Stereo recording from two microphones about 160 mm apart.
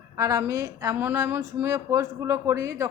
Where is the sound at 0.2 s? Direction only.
20° right (ahead or behind).